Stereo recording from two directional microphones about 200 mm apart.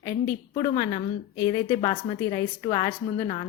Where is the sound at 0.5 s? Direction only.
25° left (ahead or behind).